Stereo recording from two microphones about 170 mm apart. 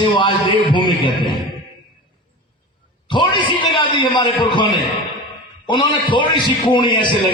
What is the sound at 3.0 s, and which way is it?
A man's voice, 30° left (ahead or behind).